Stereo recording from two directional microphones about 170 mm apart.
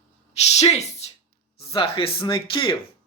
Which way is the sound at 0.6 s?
40° left (ahead or behind).